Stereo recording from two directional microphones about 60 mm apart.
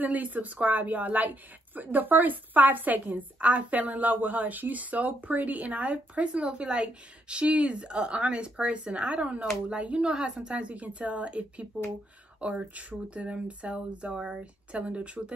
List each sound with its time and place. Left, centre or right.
0.0 s a woman's voice: right